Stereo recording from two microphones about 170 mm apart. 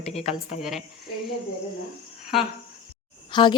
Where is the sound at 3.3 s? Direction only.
25° left (ahead or behind).